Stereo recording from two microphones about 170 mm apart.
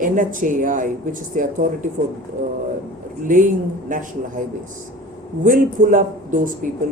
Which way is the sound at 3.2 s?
50° right (ahead or behind).